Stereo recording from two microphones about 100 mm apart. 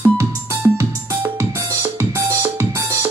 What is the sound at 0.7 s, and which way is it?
Music, 30° right (ahead or behind).